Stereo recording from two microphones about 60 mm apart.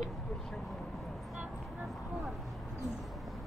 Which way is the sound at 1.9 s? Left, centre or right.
Centre.